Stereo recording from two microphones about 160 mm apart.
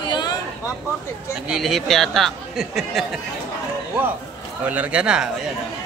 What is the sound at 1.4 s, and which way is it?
Speech, centre (ahead or behind).